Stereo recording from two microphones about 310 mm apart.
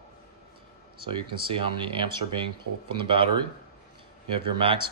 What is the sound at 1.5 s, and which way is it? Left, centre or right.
Speech, centre.